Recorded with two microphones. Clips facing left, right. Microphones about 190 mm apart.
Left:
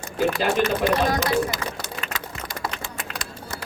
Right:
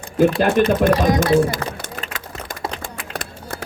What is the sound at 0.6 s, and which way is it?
A man's voice, 55° right (ahead or behind).